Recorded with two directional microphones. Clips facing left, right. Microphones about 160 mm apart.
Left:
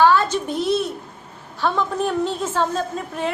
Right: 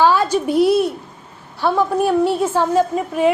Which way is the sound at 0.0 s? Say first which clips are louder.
Right 1 dB; 15° right (ahead or behind).